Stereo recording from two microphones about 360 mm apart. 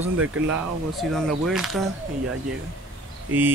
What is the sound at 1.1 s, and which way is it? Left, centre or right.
Speech, centre.